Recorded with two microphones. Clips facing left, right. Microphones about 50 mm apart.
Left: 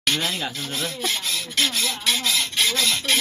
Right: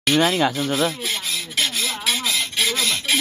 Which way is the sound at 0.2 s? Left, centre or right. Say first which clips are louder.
Right 9 dB; right.